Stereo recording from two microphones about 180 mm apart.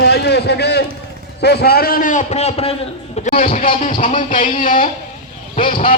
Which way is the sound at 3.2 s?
50° left (ahead or behind).